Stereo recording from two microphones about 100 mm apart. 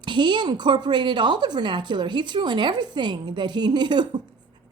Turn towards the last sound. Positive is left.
turn(degrees=-45)  # may be behind; listen again after turning